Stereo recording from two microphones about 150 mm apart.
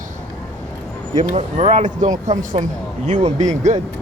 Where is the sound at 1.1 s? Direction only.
55° right (ahead or behind).